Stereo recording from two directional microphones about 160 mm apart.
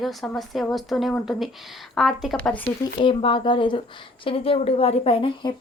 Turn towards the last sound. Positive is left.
turn(degrees=35)  # may be behind; listen again after turning